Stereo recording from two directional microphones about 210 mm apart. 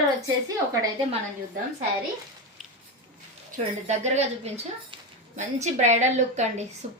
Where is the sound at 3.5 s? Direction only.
35° right (ahead or behind).